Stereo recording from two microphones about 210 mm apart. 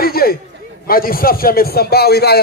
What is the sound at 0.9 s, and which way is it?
A man's voice, 45° left (ahead or behind).